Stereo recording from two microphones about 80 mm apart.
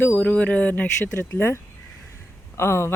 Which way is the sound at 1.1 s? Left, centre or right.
Left.